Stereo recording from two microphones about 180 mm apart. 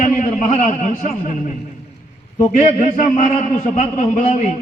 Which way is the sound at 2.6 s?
45° left (ahead or behind).